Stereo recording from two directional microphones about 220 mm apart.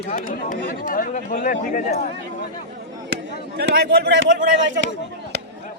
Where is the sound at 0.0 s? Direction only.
35° left (ahead or behind).